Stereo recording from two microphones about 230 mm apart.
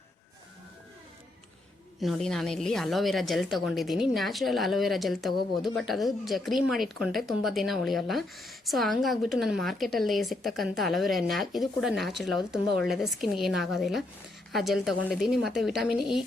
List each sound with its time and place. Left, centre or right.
2.0 s a woman's voice: centre